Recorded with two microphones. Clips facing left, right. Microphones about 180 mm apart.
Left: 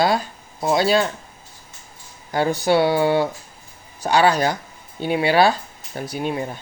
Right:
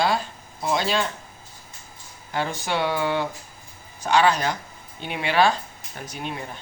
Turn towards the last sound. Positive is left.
turn(degrees=40)  # may be behind; listen again after turning